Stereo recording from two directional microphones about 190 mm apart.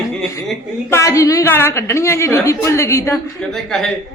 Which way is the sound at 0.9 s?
15° left (ahead or behind).